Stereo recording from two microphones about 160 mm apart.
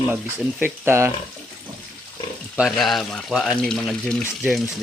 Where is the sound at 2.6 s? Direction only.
Centre (ahead or behind).